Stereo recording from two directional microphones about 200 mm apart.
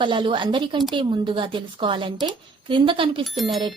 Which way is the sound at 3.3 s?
Centre (ahead or behind).